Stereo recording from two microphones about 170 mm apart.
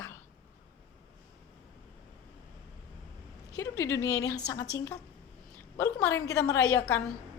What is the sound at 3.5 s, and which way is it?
A woman's voice, 15° left (ahead or behind).